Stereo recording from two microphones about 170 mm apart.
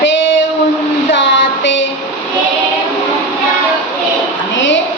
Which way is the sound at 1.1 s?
90° left.